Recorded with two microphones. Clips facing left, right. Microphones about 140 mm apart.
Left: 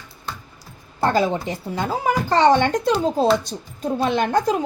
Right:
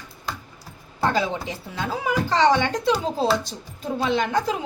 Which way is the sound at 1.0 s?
45° left (ahead or behind).